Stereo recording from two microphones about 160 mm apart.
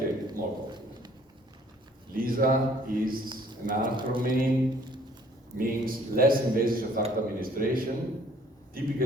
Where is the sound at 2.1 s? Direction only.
65° right (ahead or behind).